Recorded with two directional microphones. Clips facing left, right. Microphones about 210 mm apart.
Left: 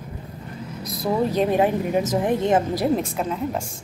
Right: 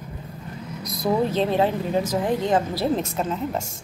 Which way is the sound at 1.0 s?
5° left (ahead or behind).